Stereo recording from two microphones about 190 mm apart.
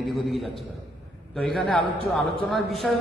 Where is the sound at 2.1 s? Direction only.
Centre (ahead or behind).